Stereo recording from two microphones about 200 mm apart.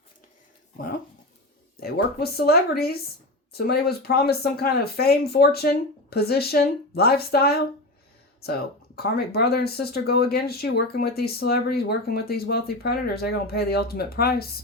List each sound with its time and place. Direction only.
1.7 s speech: 50° left (ahead or behind)